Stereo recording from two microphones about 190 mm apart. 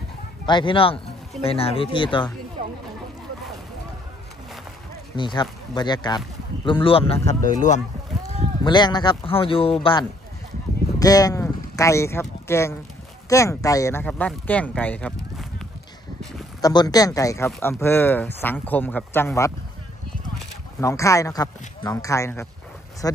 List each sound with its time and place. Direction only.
0.5 s speech: 25° left (ahead or behind)
5.1 s speech: 25° left (ahead or behind)
8.6 s speech: 20° left (ahead or behind); by 15.4 s 5° left (ahead or behind)
16.6 s speech: 20° left (ahead or behind)
20.8 s speech: 15° left (ahead or behind)